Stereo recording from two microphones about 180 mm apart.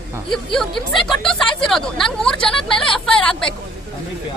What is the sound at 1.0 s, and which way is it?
Speech, 5° left (ahead or behind).